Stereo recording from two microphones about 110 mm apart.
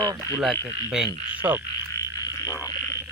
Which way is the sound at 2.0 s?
30° left (ahead or behind).